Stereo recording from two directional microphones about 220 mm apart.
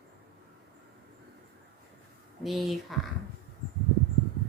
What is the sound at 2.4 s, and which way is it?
Speech, centre (ahead or behind).